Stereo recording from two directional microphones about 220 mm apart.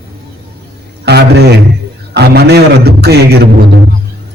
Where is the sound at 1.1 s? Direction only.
50° right (ahead or behind).